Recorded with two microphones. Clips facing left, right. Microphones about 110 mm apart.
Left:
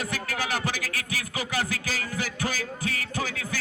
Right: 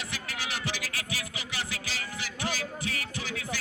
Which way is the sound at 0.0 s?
45° left (ahead or behind).